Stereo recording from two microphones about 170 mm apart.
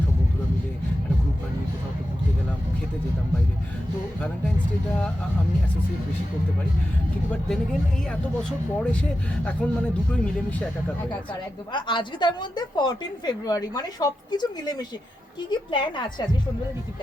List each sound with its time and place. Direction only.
7.3 s speech: 5° left (ahead or behind)
11.7 s a woman's voice: 30° left (ahead or behind)